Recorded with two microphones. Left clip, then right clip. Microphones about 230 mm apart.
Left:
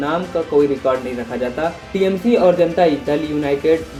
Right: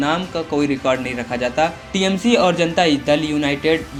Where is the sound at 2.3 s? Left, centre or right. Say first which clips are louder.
Left 2 dB; centre.